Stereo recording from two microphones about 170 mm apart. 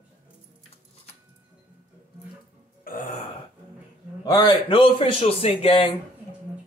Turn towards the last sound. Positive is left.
turn(degrees=30)  # may be behind; listen again after turning